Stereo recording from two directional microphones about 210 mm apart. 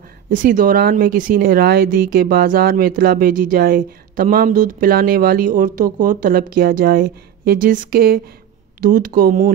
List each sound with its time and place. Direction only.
0.3 s speech: 40° right (ahead or behind)